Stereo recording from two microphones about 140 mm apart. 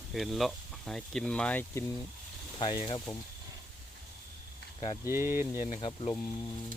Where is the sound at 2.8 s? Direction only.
25° left (ahead or behind).